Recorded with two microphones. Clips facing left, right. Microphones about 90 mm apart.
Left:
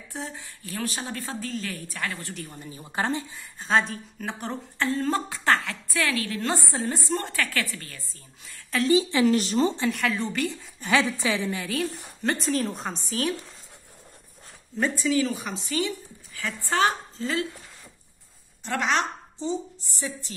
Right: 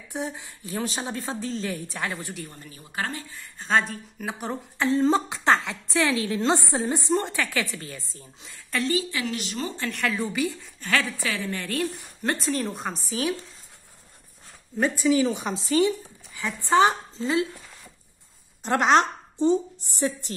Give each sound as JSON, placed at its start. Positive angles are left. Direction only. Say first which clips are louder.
{"t": 0.1, "sound": "speech", "louder": "right 5 dB", "side_deg": -15}
{"t": 2.5, "sound": "speech", "louder": "left 3 dB", "side_deg": 20}
{"t": 3.5, "sound": "speech", "louder": "even", "side_deg": 0}
{"t": 9.2, "sound": "speech", "louder": "left 9 dB", "side_deg": 35}
{"t": 9.9, "sound": "a woman's voice", "louder": "even", "side_deg": -5}
{"t": 10.8, "sound": "speech", "louder": "left 3 dB", "side_deg": 20}
{"t": 11.6, "sound": "a woman's voice", "louder": "right 1 dB", "side_deg": 0}
{"t": 14.8, "sound": "speech", "louder": "right 3 dB", "side_deg": -15}
{"t": 15.5, "sound": "speech", "louder": "right 6 dB", "side_deg": -35}
{"t": 16.3, "sound": "speech", "louder": "right 5 dB", "side_deg": -20}
{"t": 19.3, "sound": "speech", "louder": "right 10 dB", "side_deg": -55}